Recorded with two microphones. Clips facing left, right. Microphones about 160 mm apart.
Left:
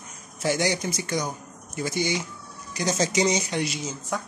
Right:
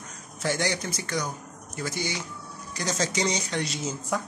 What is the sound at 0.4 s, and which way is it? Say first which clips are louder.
Speech: left 3 dB; 15° left (ahead or behind).